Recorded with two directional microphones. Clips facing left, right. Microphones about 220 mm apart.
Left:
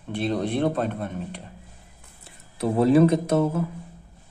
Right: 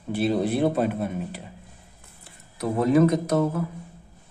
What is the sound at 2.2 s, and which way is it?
Speech, 30° left (ahead or behind).